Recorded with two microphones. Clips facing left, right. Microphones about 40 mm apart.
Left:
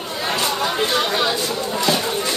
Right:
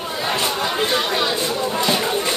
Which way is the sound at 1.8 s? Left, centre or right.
Centre.